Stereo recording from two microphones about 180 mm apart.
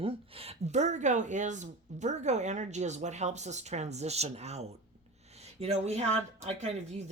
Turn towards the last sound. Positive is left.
turn(degrees=-40)  # may be behind; listen again after turning